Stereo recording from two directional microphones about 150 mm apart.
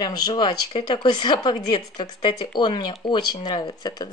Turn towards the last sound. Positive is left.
turn(degrees=30)  # may be behind; listen again after turning